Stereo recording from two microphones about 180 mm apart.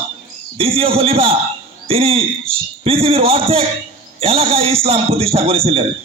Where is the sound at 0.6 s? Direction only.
30° right (ahead or behind).